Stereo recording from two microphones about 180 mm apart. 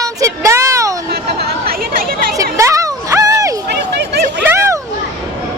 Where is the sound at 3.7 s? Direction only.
70° right (ahead or behind).